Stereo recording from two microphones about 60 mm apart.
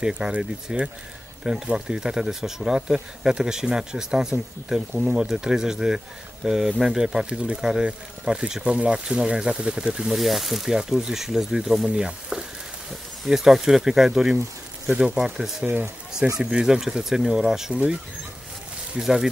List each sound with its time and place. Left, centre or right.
0.0 s speech: centre
15.6 s speech: right
16.4 s speech: centre
18.9 s speech: centre